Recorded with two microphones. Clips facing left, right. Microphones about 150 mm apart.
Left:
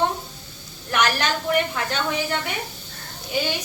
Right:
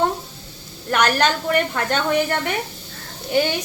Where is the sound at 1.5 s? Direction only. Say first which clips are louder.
Right 3 dB; 55° right (ahead or behind).